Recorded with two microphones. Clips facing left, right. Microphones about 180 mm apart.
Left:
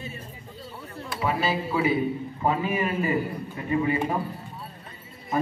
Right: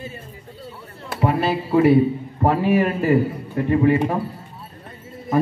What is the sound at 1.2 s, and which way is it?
A man's voice, 60° right (ahead or behind).